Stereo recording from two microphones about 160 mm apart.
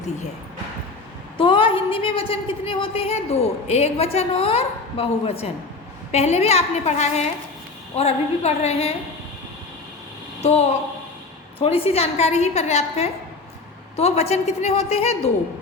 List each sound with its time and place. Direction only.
1.4 s a woman's voice: 35° left (ahead or behind)
11.6 s a woman's voice: 35° left (ahead or behind)